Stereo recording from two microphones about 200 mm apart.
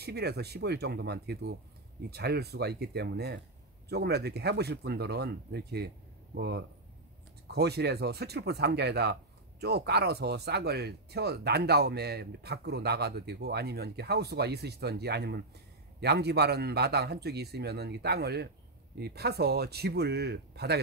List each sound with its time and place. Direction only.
0.0 s a man's voice: 55° right (ahead or behind)